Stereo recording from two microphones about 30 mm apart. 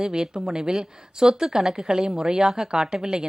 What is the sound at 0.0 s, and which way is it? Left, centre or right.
Speech, right.